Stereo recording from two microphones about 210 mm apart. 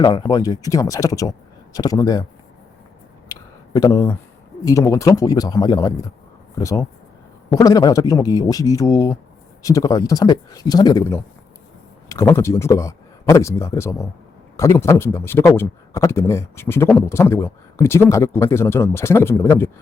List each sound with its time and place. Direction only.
0.0 s speech: 20° left (ahead or behind)
3.2 s a sound: 15° left (ahead or behind)
4.6 s speech: 15° left (ahead or behind)